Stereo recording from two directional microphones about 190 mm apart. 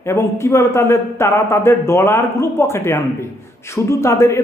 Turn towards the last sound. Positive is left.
turn(degrees=15)  # may be behind; listen again after turning